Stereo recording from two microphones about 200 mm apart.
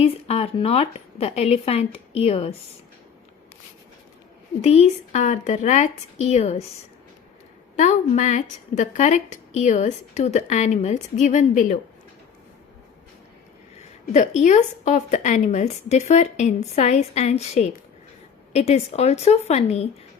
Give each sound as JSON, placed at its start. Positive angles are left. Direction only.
{"t": 0.0, "sound": "speech", "side_deg": 30}
{"t": 4.6, "sound": "a woman's voice", "side_deg": 35}
{"t": 7.8, "sound": "a woman's voice", "side_deg": 35}
{"t": 13.7, "sound": "a woman's voice", "side_deg": 35}